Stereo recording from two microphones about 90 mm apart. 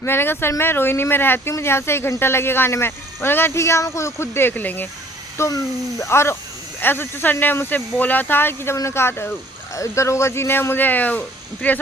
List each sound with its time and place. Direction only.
0.0 s speech: 25° left (ahead or behind)
5.4 s speech: 35° left (ahead or behind); by 11.8 s 15° left (ahead or behind)